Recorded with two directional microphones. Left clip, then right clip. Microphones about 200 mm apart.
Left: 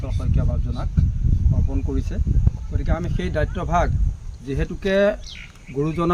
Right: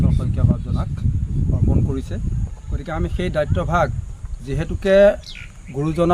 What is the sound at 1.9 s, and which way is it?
Speech, 25° right (ahead or behind).